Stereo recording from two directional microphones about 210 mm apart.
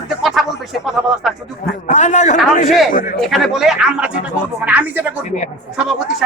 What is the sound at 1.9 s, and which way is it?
Speech, 35° left (ahead or behind).